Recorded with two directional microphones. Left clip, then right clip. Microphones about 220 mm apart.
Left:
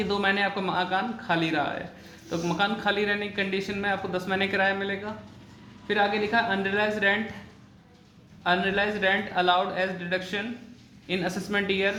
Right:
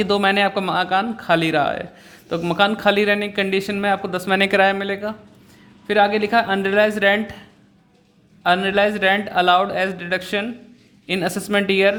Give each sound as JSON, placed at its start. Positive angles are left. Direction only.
{"t": 0.0, "sound": "a man's voice", "side_deg": -50}
{"t": 8.4, "sound": "a man's voice", "side_deg": -50}